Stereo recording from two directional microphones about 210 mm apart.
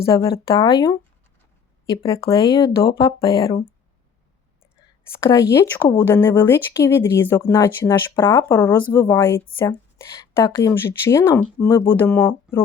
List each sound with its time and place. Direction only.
0.3 s speech: 25° left (ahead or behind)
2.2 s speech: 20° left (ahead or behind)
5.0 s speech: 10° left (ahead or behind)